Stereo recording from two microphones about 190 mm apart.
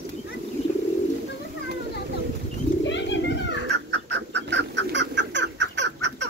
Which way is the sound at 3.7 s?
65° right (ahead or behind).